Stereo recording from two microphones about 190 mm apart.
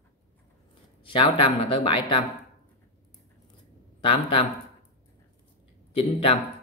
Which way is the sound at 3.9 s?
30° left (ahead or behind).